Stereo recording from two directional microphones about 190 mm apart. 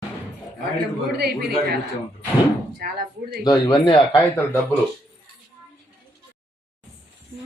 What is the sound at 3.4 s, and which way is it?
Speech, 20° left (ahead or behind).